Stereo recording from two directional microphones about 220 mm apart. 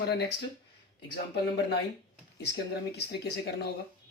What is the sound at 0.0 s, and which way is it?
Speech, 50° left (ahead or behind).